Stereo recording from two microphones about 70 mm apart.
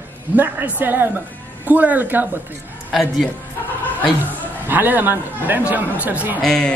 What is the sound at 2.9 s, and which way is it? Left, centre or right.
Speech, centre.